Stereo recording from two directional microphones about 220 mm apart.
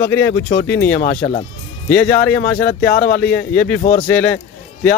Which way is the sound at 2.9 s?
40° left (ahead or behind).